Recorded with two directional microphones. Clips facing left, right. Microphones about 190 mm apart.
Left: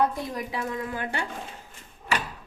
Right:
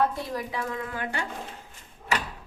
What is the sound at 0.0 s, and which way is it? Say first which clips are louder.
A woman's voice: left 1 dB; 20° left (ahead or behind).